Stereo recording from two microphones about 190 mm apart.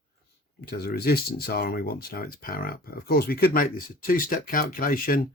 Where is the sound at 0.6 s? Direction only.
55° left (ahead or behind).